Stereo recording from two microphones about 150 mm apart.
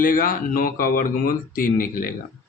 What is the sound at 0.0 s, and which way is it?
Speech, 65° left (ahead or behind).